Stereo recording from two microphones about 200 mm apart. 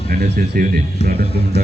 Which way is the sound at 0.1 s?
50° right (ahead or behind).